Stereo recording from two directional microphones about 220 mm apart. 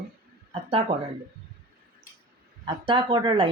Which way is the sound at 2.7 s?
20° right (ahead or behind).